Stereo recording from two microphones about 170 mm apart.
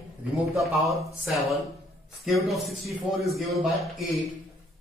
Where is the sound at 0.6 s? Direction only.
Centre (ahead or behind).